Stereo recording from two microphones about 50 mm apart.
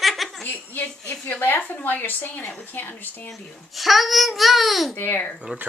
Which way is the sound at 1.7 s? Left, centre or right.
Left.